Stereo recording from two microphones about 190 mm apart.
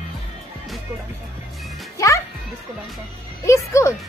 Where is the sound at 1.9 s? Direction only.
15° left (ahead or behind).